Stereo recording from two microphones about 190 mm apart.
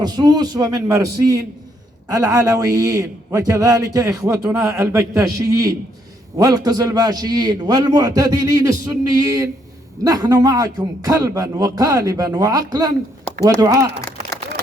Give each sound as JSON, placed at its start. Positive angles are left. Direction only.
{"t": 0.0, "sound": "a man's voice", "side_deg": -20}